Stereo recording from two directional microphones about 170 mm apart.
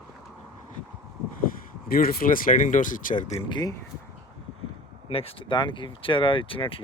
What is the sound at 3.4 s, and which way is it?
Speech, 25° left (ahead or behind).